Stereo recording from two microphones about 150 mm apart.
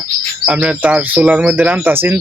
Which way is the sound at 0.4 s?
5° right (ahead or behind).